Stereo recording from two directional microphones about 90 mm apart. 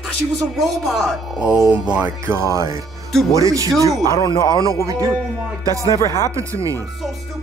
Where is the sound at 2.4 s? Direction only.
35° right (ahead or behind).